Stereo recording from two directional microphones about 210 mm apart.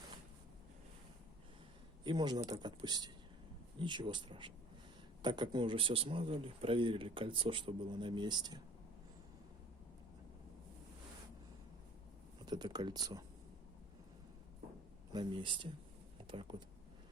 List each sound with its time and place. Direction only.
2.0 s speech: 20° right (ahead or behind)
12.5 s speech: 20° right (ahead or behind)
15.1 s speech: 20° right (ahead or behind)